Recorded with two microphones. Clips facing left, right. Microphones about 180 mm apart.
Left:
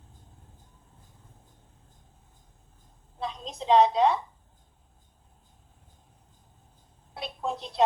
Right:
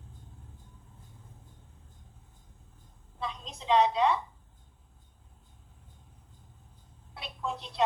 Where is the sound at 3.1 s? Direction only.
40° left (ahead or behind).